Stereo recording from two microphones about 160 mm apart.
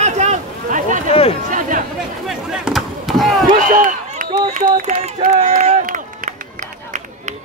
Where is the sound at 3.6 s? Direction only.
55° right (ahead or behind).